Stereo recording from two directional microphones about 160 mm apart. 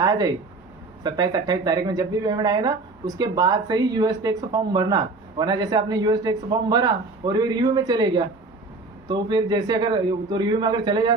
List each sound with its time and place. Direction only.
0.0 s speech: 25° right (ahead or behind)